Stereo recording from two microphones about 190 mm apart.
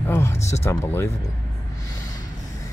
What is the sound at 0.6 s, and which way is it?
Speech, 10° left (ahead or behind).